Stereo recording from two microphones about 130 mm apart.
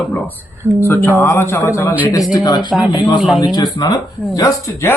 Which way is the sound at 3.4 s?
30° left (ahead or behind).